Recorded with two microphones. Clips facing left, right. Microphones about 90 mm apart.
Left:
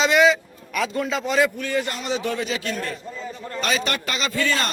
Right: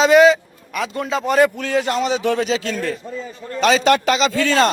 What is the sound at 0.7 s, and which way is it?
Speech, 30° right (ahead or behind).